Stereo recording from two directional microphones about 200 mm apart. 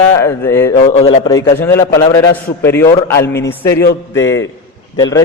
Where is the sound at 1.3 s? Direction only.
20° left (ahead or behind).